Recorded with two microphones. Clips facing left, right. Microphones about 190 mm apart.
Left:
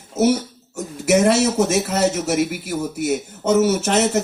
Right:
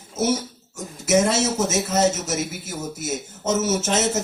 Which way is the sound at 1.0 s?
65° left (ahead or behind).